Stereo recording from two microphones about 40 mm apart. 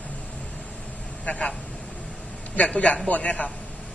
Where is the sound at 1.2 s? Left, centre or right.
Left.